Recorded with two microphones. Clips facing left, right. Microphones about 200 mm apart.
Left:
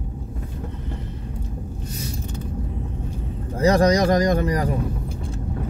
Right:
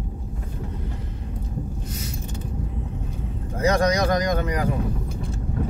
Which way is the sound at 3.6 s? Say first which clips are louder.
Left 4 dB; 35° left (ahead or behind).